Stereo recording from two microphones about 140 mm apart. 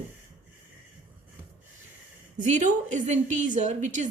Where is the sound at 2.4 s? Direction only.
60° right (ahead or behind).